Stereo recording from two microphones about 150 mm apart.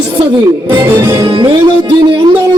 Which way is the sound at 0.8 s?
15° right (ahead or behind).